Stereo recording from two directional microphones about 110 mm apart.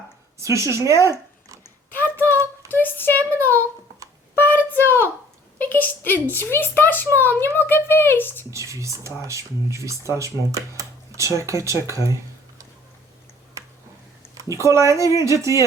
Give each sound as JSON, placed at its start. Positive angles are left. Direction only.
{"t": 0.3, "sound": "speech", "side_deg": -25}
{"t": 1.9, "sound": "a sound", "side_deg": 20}
{"t": 4.4, "sound": "a sound", "side_deg": 15}
{"t": 5.6, "sound": "a child's voice", "side_deg": 15}
{"t": 8.4, "sound": "speech", "side_deg": -25}
{"t": 14.3, "sound": "speech", "side_deg": -30}